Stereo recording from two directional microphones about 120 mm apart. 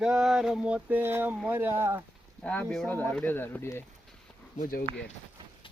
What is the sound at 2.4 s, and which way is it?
Speech, 10° left (ahead or behind).